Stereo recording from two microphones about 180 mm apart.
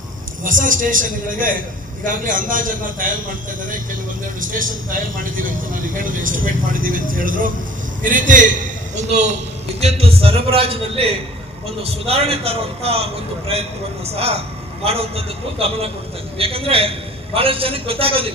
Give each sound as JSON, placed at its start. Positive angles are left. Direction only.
{"t": 0.4, "sound": "speech", "side_deg": -50}
{"t": 4.4, "sound": "speech", "side_deg": -50}
{"t": 9.8, "sound": "a man's voice", "side_deg": -30}